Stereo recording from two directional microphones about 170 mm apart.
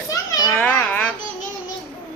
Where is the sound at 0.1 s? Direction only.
15° left (ahead or behind).